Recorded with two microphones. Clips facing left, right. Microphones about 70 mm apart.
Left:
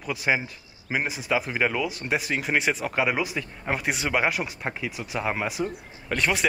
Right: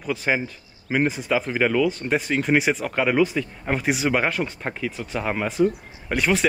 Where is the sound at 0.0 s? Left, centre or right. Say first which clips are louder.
Right 2 dB; centre.